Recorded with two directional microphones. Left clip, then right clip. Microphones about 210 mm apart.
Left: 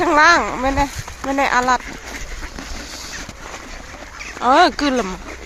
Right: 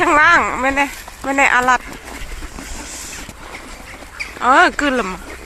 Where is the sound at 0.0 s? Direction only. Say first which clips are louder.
Right 1 dB; 10° left (ahead or behind).